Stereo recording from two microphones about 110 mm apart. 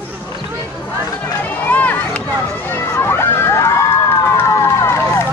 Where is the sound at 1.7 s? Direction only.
10° left (ahead or behind).